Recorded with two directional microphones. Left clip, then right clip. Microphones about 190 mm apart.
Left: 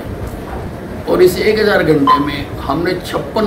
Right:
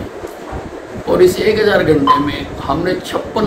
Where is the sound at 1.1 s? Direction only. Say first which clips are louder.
Even; 5° left (ahead or behind).